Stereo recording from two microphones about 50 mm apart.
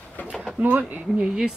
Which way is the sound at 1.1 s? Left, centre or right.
Centre.